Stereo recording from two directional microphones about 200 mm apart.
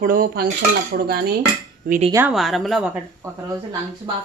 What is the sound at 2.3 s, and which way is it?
Speech, centre (ahead or behind).